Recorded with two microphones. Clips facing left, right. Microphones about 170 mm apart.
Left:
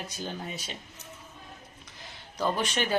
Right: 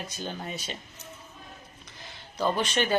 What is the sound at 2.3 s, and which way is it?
Speech, 10° left (ahead or behind).